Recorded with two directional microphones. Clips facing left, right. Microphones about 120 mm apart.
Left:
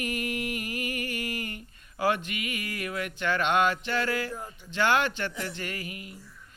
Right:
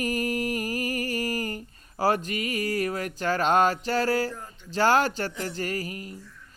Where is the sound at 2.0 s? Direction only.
40° right (ahead or behind).